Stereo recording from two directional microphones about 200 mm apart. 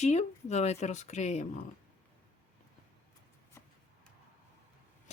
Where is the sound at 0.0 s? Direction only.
35° left (ahead or behind).